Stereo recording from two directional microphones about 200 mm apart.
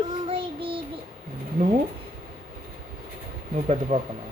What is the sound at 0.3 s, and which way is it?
Child singing, 25° right (ahead or behind).